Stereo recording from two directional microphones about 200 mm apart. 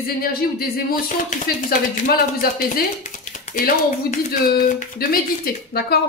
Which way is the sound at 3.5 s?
45° left (ahead or behind).